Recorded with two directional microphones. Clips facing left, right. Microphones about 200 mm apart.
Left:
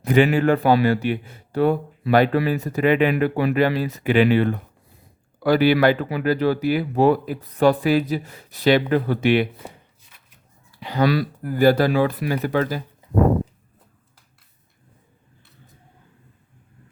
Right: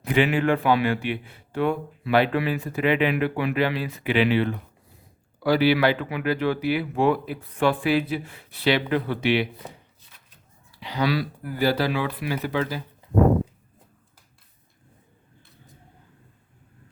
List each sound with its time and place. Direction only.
0.0 s a man's voice: 45° left (ahead or behind)
10.7 s a man's voice: 50° left (ahead or behind)